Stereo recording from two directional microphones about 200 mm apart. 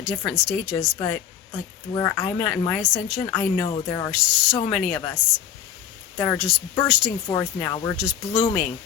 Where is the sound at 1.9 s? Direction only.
15° left (ahead or behind).